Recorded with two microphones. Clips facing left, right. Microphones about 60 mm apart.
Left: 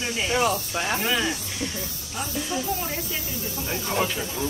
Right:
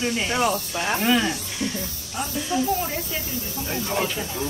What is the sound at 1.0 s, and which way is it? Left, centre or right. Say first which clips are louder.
Speech: right 6 dB; centre.